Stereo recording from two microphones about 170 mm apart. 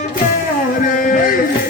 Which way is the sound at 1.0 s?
55° left (ahead or behind).